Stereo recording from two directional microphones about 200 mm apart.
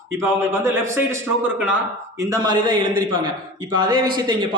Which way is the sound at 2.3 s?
20° right (ahead or behind).